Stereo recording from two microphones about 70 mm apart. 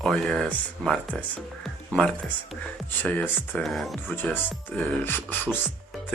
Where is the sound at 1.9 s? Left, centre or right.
Left.